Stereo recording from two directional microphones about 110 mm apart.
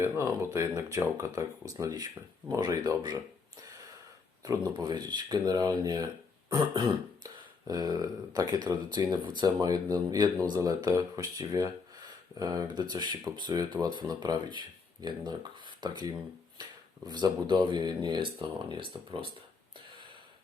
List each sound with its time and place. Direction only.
0.0 s speech: 20° right (ahead or behind)
4.4 s speech: 35° right (ahead or behind)
17.1 s speech: 40° right (ahead or behind)